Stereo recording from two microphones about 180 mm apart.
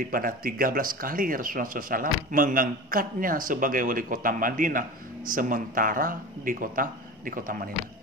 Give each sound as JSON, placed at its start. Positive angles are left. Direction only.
{"t": 0.0, "sound": "speech", "side_deg": -50}